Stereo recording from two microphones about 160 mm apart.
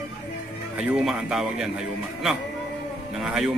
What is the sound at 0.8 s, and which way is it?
Speech, 5° right (ahead or behind).